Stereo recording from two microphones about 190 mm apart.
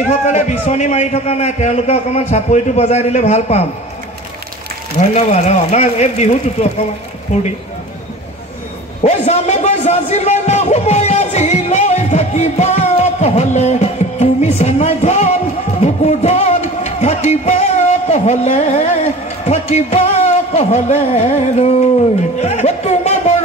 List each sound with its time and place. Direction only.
0.3 s a man's voice: 40° left (ahead or behind)
4.9 s a man's voice: 35° left (ahead or behind)
9.0 s a man's voice: 35° left (ahead or behind)
12.9 s music: 35° left (ahead or behind)
15.8 s a man's voice: 35° left (ahead or behind)